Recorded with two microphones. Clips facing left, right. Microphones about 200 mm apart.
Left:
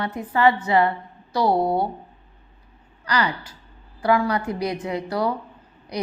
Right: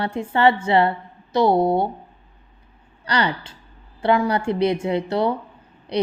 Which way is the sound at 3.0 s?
30° right (ahead or behind).